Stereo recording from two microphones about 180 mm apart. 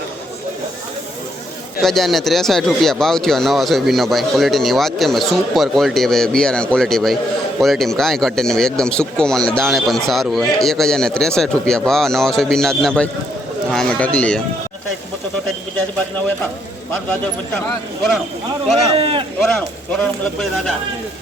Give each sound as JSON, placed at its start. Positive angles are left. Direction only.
{"t": 1.8, "sound": "speech", "side_deg": 0}
{"t": 18.9, "sound": "speech", "side_deg": -30}
{"t": 19.5, "sound": "speech", "side_deg": 5}